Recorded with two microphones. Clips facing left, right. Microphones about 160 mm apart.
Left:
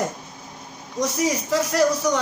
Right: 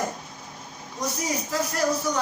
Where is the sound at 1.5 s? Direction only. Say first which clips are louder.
Left 5 dB; 90° left.